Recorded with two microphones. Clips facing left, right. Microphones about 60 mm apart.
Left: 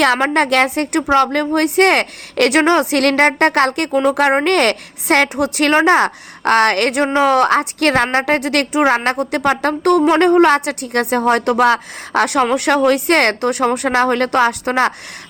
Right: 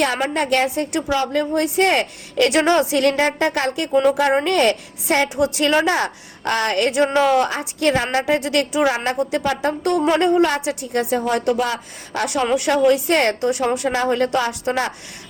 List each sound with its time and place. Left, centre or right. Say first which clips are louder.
0.3 s speech: left 4 dB; left
2.5 s a woman's voice: left 3 dB; left
2.9 s speech: left 4 dB; left
7.0 s a woman's voice: left 1 dB; left
7.3 s speech: left 6 dB; left
8.7 s a woman's voice: left 4 dB; left
14.0 s speech: left 6 dB; left